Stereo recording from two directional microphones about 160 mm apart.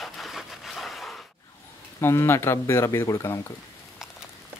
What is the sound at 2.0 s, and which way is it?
Speech, 15° left (ahead or behind).